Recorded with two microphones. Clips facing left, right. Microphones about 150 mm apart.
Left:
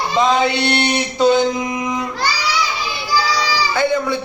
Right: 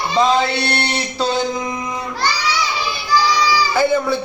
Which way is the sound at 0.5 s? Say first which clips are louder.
Left 3 dB; 20° left (ahead or behind).